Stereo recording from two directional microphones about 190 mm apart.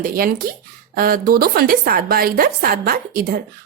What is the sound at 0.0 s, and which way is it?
A woman's voice, 50° right (ahead or behind).